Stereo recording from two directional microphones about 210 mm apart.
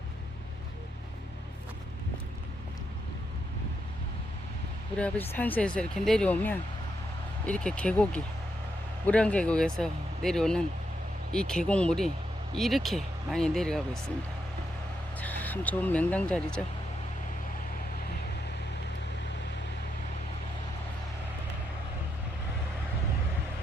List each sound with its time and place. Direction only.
4.9 s speech: 5° left (ahead or behind)
15.2 s speech: 10° left (ahead or behind)